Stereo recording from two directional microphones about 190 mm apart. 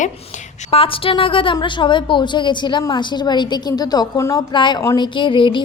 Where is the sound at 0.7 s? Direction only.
30° left (ahead or behind).